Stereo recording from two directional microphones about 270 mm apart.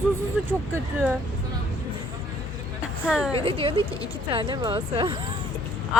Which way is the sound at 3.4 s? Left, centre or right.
Centre.